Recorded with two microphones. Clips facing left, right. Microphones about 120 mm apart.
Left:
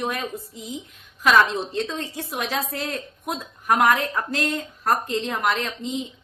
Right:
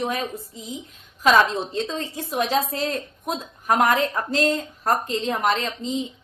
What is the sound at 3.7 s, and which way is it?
Speech, 25° right (ahead or behind).